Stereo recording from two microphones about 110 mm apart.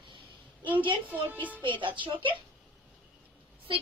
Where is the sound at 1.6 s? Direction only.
50° right (ahead or behind).